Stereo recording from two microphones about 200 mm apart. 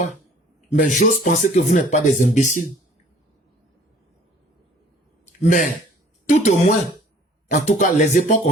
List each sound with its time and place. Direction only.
0.7 s speech: 35° left (ahead or behind)
5.2 s a sound: 40° left (ahead or behind)
6.2 s speech: 35° left (ahead or behind)